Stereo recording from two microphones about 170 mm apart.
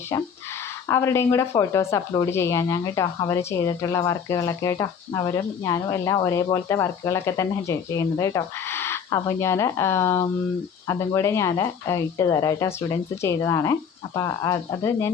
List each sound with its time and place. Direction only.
0.9 s speech: 15° left (ahead or behind)